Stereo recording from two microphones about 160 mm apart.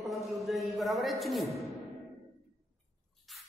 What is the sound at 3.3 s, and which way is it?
Drip, centre (ahead or behind).